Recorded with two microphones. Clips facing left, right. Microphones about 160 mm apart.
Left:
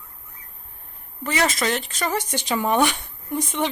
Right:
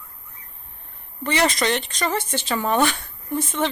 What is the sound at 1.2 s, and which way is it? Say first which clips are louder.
Speech: right 2 dB; 5° left (ahead or behind).